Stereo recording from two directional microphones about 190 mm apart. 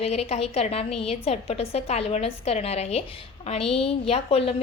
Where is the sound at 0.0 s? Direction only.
35° left (ahead or behind).